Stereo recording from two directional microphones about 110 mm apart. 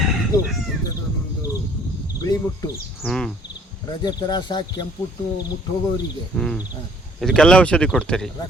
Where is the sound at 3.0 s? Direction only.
5° left (ahead or behind).